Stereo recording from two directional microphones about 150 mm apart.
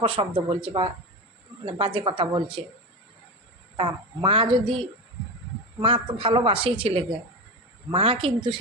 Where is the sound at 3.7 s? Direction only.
35° right (ahead or behind).